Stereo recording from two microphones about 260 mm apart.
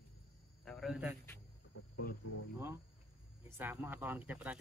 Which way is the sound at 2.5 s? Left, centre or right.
Centre.